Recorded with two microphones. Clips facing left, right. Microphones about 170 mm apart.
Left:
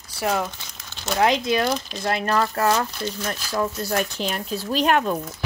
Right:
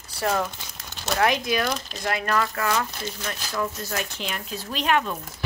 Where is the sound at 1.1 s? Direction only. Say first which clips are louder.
Left 3 dB; 25° left (ahead or behind); by 5.1 s 40° left (ahead or behind).